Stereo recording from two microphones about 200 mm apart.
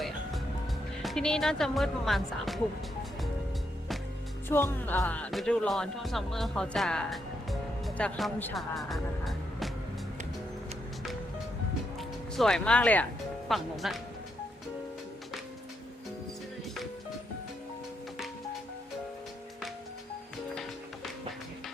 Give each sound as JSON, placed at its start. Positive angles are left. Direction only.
{"t": 1.0, "sound": "speech", "side_deg": 5}
{"t": 4.4, "sound": "speech", "side_deg": 10}
{"t": 11.9, "sound": "music", "side_deg": 0}
{"t": 13.5, "sound": "speech", "side_deg": 0}